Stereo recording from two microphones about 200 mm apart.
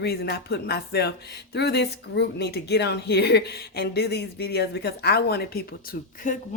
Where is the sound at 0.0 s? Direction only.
50° left (ahead or behind).